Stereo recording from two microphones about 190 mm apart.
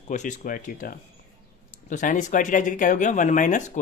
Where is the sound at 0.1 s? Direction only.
40° left (ahead or behind).